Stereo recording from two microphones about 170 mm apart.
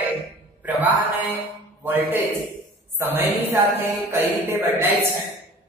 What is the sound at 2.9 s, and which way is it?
Speech, 15° right (ahead or behind).